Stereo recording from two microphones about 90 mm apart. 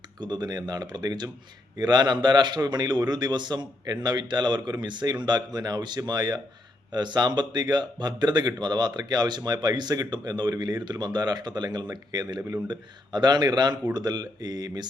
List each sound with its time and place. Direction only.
0.2 s speech: 55° right (ahead or behind)